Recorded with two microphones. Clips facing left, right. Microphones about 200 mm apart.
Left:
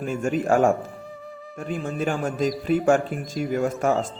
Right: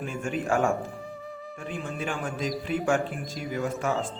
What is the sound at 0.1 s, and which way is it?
Speech, 40° left (ahead or behind).